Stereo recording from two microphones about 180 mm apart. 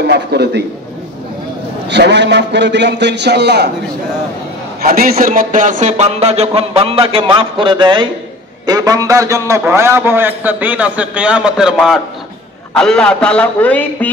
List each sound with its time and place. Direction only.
0.0 s a man's voice: 65° right (ahead or behind)
1.9 s a man's voice: 75° right (ahead or behind)
4.8 s a man's voice: 55° right (ahead or behind); by 14.1 s 10° left (ahead or behind)